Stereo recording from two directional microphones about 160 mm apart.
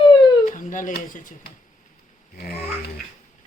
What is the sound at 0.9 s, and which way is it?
Speech, 55° left (ahead or behind).